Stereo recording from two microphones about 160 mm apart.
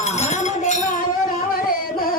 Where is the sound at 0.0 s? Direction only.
45° left (ahead or behind).